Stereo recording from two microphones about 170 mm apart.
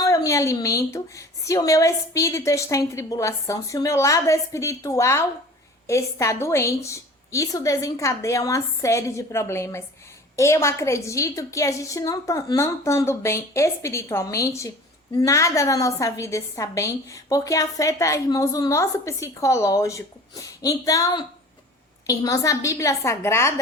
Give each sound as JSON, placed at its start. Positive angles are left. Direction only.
{"t": 0.0, "sound": "a woman's voice", "side_deg": 20}